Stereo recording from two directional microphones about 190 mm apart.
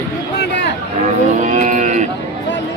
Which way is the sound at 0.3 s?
65° left (ahead or behind).